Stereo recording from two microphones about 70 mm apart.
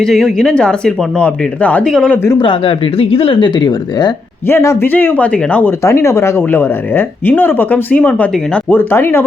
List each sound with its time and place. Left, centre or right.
0.0 s speech: centre
1.8 s speech: centre
3.6 s speech: left
4.4 s a man's voice: left
4.9 s speech: left
5.8 s speech: left